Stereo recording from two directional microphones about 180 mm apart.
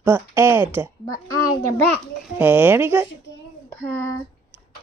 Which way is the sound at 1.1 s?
15° left (ahead or behind).